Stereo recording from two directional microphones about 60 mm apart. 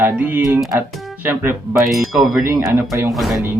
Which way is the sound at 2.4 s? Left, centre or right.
Right.